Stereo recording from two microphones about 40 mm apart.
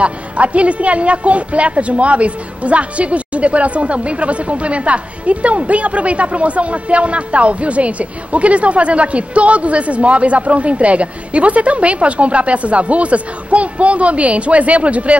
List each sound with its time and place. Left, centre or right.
0.0 s a woman's voice: right